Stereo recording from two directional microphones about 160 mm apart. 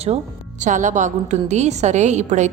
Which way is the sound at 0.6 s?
50° right (ahead or behind).